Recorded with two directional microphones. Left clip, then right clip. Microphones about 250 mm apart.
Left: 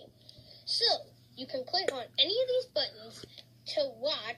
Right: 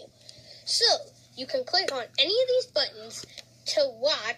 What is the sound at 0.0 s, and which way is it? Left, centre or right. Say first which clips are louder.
Speech: right 6 dB; right.